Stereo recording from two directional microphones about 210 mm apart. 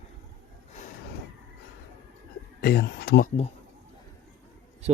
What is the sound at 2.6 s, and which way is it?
Speech, 50° left (ahead or behind).